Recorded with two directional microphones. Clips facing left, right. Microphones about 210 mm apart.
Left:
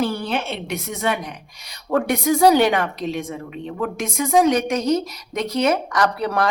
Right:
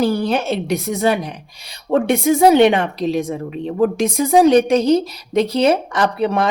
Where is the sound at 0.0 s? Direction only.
40° right (ahead or behind).